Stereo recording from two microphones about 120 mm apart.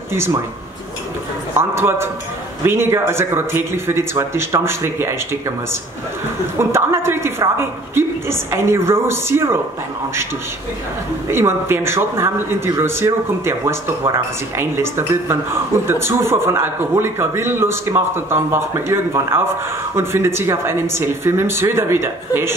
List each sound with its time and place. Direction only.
1.6 s speech: 20° right (ahead or behind)
11.2 s speech: 20° right (ahead or behind)